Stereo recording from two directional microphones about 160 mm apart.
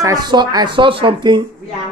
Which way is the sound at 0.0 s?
25° right (ahead or behind).